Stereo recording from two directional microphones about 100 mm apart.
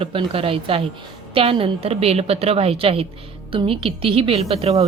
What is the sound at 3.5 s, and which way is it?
A woman's voice, 65° right (ahead or behind).